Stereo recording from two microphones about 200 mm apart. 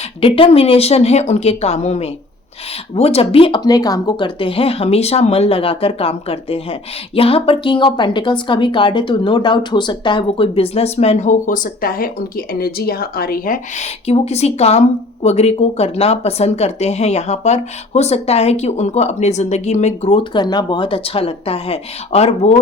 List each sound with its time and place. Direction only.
0.2 s a woman's voice: 25° left (ahead or behind)